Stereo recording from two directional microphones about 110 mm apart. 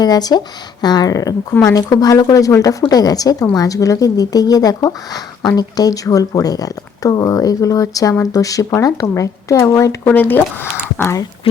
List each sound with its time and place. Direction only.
0.0 s speech: 35° left (ahead or behind); by 11.2 s 20° left (ahead or behind)